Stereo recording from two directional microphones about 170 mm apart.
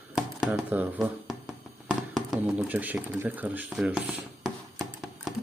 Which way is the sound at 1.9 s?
5° right (ahead or behind).